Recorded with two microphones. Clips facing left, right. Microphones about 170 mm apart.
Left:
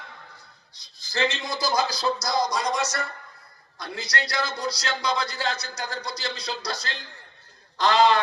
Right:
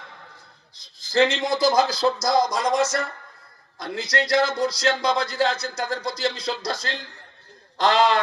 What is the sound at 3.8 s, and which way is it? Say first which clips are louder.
Speech: right 5 dB; 50° right (ahead or behind).